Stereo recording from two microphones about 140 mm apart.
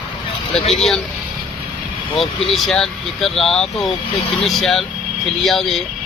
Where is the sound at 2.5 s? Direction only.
Centre (ahead or behind).